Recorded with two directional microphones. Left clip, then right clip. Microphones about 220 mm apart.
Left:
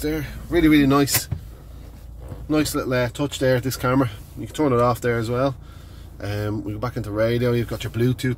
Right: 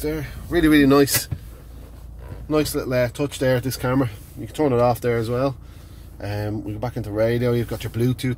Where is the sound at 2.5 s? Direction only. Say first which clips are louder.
Even; centre (ahead or behind).